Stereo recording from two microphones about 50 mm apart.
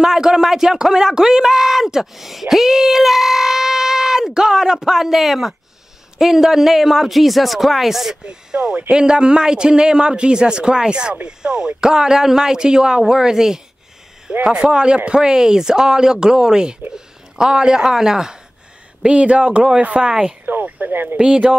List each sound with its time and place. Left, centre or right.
0.0 s a man's voice: centre
19.0 s speech: right
20.4 s speech: right
21.2 s speech: centre